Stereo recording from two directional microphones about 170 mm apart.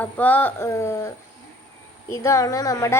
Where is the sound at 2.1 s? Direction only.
15° left (ahead or behind).